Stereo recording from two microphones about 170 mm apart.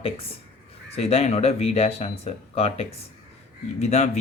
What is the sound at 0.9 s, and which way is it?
Speech, 40° left (ahead or behind).